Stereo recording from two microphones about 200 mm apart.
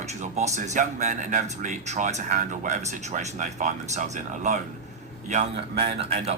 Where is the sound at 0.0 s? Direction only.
35° right (ahead or behind).